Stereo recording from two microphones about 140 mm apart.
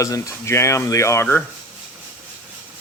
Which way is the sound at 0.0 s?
20° left (ahead or behind).